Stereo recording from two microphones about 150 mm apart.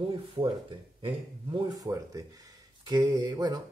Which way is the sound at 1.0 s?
25° right (ahead or behind).